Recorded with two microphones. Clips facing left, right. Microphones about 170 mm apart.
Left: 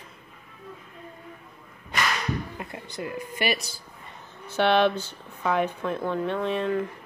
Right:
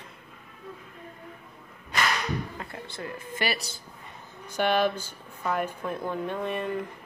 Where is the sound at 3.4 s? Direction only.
35° right (ahead or behind).